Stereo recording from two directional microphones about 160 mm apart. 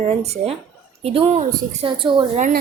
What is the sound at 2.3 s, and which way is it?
Speech, 55° right (ahead or behind).